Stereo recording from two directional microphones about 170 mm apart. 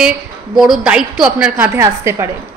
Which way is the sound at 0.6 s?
5° right (ahead or behind).